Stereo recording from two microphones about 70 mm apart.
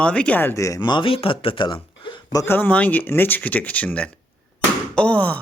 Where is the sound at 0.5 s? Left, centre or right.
Left.